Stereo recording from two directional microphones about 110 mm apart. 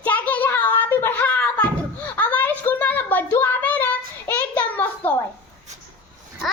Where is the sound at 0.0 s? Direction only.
15° left (ahead or behind).